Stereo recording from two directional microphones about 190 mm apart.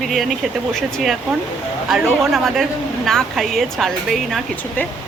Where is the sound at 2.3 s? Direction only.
Centre (ahead or behind).